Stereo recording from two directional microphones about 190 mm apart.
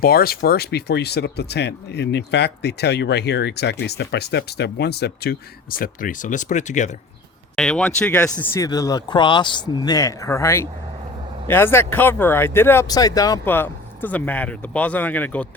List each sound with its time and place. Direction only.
0.0 s speech: 55° left (ahead or behind)
5.8 s speech: 45° left (ahead or behind)
7.5 s speech: 5° left (ahead or behind)